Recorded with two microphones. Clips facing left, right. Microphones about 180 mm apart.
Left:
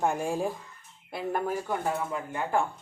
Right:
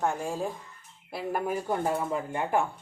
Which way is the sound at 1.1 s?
Centre (ahead or behind).